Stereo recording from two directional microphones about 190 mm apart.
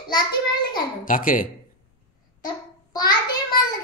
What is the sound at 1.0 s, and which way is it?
Speech, 45° left (ahead or behind).